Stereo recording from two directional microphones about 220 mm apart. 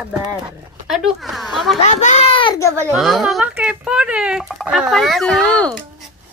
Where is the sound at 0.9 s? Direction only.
Centre (ahead or behind).